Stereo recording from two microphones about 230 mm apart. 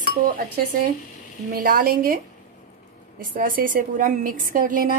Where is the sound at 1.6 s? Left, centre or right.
Right.